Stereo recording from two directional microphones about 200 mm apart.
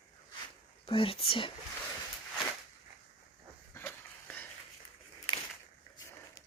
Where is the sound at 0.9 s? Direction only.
25° left (ahead or behind).